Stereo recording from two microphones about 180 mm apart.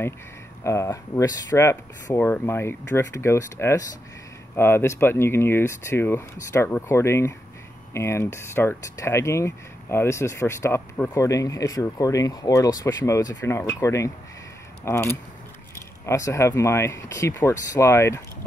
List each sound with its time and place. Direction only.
0.7 s speech: 15° left (ahead or behind)